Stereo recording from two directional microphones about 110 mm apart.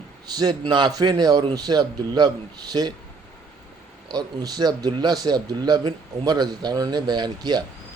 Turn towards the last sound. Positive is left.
turn(degrees=-40)  # may be behind; listen again after turning